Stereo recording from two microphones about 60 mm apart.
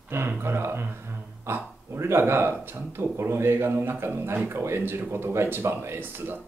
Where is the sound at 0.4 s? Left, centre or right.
Right.